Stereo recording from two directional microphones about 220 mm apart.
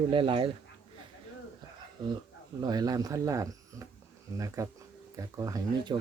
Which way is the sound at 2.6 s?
20° right (ahead or behind).